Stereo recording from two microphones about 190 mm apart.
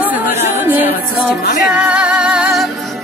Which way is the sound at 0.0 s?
10° right (ahead or behind).